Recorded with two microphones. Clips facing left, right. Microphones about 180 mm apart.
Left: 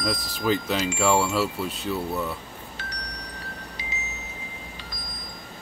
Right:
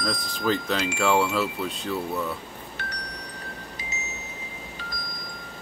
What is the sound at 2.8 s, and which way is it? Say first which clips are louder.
Chime: right 3 dB; 55° right (ahead or behind).